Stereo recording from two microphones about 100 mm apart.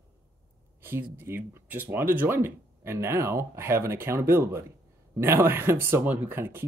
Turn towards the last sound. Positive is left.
turn(degrees=-20)  # may be behind; listen again after turning